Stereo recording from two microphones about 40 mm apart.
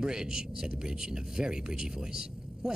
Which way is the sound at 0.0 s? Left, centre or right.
Centre.